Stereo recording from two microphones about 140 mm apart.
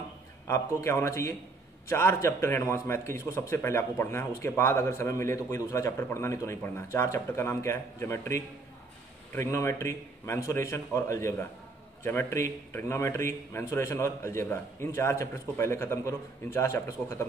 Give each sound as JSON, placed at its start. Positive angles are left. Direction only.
{"t": 0.5, "sound": "a man's voice", "side_deg": 20}